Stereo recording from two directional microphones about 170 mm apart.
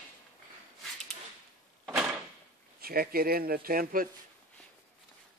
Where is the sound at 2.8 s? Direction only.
60° right (ahead or behind).